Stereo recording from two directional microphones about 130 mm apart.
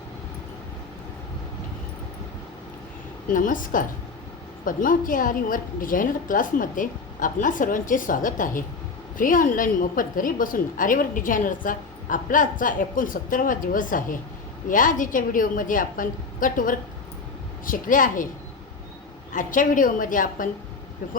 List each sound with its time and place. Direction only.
3.2 s a woman's voice: 90° left
19.3 s a woman's voice: 90° left